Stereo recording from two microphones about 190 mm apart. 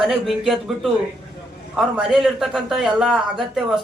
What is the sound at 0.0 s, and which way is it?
A man's voice, centre (ahead or behind).